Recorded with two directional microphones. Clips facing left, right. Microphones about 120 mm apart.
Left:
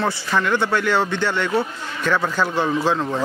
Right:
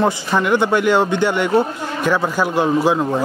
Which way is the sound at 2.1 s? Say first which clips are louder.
Right 2 dB; 15° right (ahead or behind).